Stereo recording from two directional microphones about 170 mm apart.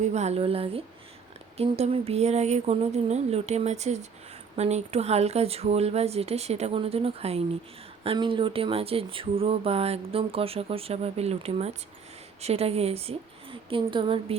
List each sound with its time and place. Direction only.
0.0 s speech: 40° right (ahead or behind)